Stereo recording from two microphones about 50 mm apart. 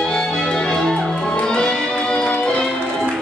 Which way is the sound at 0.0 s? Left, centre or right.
Centre.